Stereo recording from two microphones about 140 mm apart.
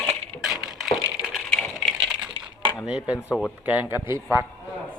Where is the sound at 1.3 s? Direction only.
Centre (ahead or behind).